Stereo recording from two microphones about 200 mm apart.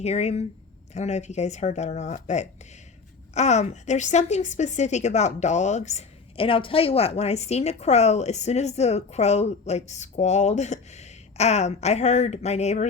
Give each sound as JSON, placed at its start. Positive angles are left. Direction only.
{"t": 0.0, "sound": "a woman's voice", "side_deg": 30}